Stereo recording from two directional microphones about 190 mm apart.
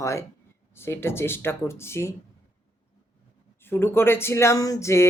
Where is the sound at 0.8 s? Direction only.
15° left (ahead or behind).